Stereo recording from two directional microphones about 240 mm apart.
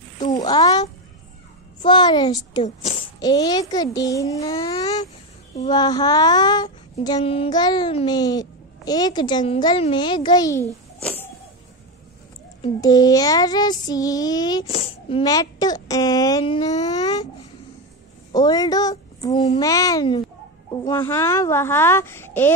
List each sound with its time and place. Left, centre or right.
0.2 s a sound: centre
1.8 s female singing: centre
12.6 s child singing: centre
18.3 s a woman's voice: centre
19.6 s female singing: centre